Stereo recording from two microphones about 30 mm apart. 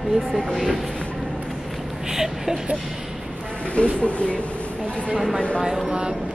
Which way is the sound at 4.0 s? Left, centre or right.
Left.